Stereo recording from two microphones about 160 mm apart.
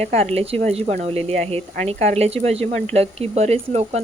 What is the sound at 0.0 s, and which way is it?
Speech, 40° right (ahead or behind).